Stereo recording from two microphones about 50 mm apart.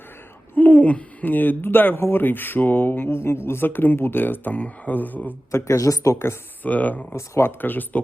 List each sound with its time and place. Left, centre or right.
0.5 s speech: left
5.5 s speech: left
6.6 s speech: left
7.2 s speech: left
7.6 s speech: left